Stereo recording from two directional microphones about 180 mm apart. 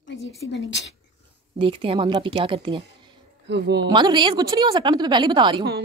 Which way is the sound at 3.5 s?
70° right (ahead or behind).